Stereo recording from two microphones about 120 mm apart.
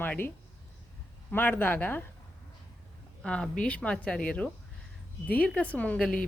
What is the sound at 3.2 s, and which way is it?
Speech, 10° left (ahead or behind).